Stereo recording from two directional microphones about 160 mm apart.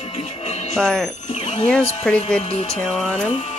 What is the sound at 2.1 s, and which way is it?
Speech, 5° left (ahead or behind).